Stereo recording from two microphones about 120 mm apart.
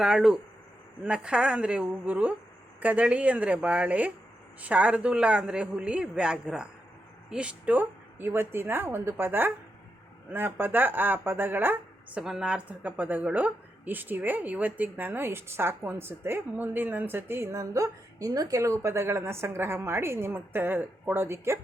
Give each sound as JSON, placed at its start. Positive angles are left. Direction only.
{"t": 0.0, "sound": "a woman's voice", "side_deg": -5}